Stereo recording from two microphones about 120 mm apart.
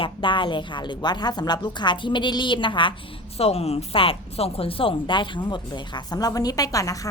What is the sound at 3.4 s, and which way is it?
Speech, 60° left (ahead or behind).